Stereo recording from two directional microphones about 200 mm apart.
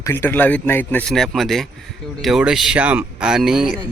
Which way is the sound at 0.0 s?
10° left (ahead or behind).